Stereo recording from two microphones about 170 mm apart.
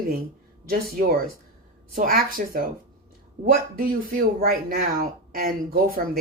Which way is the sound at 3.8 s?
55° right (ahead or behind).